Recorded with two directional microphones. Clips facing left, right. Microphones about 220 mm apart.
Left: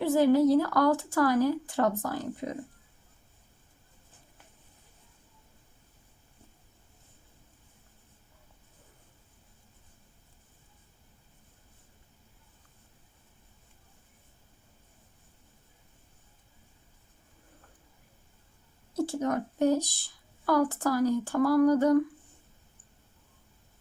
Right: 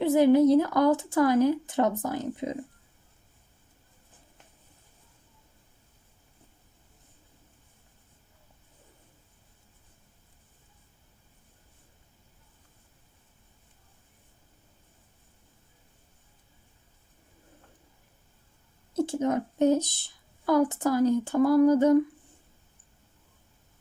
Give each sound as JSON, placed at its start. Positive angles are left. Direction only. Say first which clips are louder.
{"t": 0.0, "sound": "a woman's voice", "louder": "right 3 dB", "side_deg": -20}
{"t": 18.9, "sound": "a woman's voice", "louder": "right 3 dB", "side_deg": -20}